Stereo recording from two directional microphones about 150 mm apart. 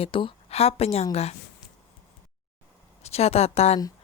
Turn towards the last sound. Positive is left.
turn(degrees=45)  # may be behind; listen again after turning